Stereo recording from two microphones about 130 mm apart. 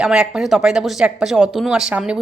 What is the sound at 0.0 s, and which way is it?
A woman's voice, 5° right (ahead or behind).